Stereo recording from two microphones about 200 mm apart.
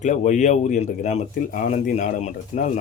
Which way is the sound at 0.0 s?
40° left (ahead or behind).